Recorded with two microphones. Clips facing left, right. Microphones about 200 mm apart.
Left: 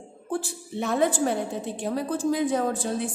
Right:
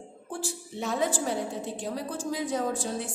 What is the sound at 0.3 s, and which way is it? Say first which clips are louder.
A woman's voice: left 6 dB; 60° left (ahead or behind).